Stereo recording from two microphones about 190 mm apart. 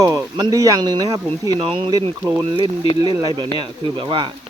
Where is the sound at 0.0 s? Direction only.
20° right (ahead or behind).